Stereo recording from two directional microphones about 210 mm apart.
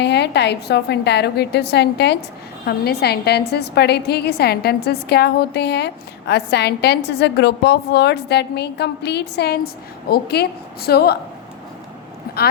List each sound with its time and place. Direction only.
0.0 s a woman's voice: 55° left (ahead or behind)